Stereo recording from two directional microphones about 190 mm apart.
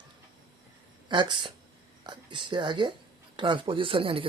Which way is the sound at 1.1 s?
25° right (ahead or behind).